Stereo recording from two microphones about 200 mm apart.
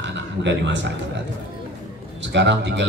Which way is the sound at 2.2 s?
60° right (ahead or behind).